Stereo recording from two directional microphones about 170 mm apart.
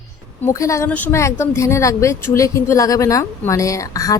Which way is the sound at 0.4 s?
20° left (ahead or behind).